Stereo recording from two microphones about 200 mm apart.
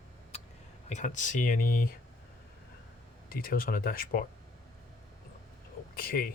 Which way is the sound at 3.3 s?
45° left (ahead or behind).